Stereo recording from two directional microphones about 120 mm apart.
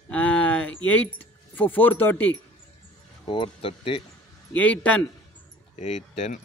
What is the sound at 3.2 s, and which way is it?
Speech, 45° left (ahead or behind).